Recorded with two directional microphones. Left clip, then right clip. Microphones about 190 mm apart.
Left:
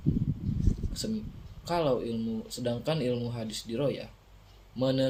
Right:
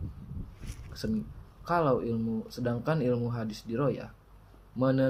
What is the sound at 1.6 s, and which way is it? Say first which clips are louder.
Speech: right 1 dB; 15° left (ahead or behind).